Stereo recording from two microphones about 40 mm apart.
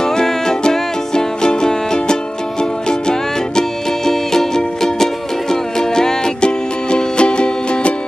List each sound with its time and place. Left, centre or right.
0.0 s music: centre